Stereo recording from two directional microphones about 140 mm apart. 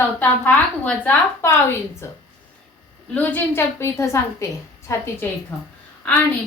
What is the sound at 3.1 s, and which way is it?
A woman's voice, 15° left (ahead or behind).